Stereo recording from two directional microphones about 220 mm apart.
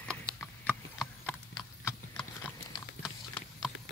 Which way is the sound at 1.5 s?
20° left (ahead or behind).